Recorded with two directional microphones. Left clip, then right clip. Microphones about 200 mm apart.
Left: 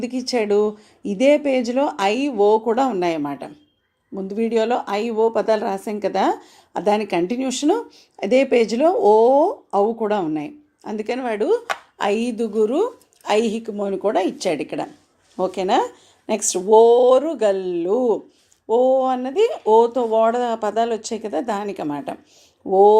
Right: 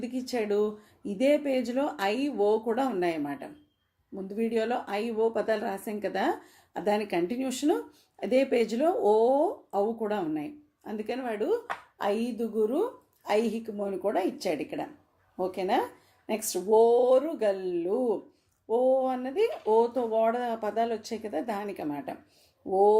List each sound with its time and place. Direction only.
0.0 s speech: 20° left (ahead or behind)